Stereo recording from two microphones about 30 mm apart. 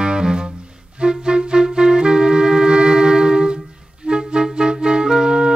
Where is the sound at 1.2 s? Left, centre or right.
Right.